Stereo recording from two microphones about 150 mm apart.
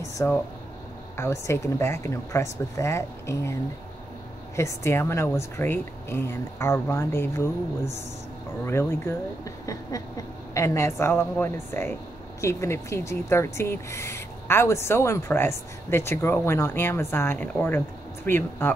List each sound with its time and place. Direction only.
0.0 s air conditioning: 20° left (ahead or behind)
1.1 s speech: 20° left (ahead or behind)
4.6 s speech: 20° left (ahead or behind)